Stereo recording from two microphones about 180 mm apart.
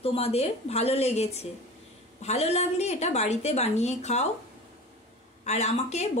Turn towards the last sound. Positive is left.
turn(degrees=40)  # may be behind; listen again after turning